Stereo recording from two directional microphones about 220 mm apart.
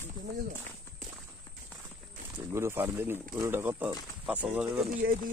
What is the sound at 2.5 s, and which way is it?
Speech, 10° right (ahead or behind).